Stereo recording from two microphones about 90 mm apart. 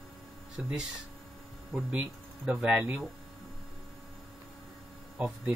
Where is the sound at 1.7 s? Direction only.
20° right (ahead or behind).